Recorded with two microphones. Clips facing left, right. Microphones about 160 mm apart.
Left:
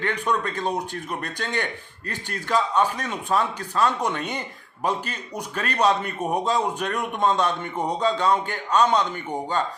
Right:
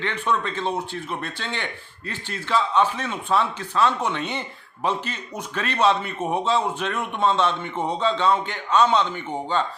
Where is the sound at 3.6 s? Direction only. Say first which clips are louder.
Right 1 dB; 40° left (ahead or behind).